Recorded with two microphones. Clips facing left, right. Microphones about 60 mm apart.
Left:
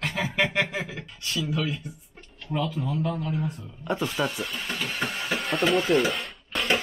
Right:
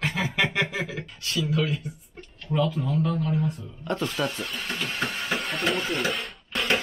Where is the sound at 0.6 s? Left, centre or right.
Centre.